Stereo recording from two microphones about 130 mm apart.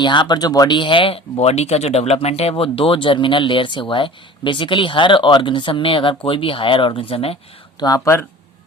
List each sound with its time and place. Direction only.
0.0 s speech: 35° left (ahead or behind)
7.8 s speech: 30° left (ahead or behind)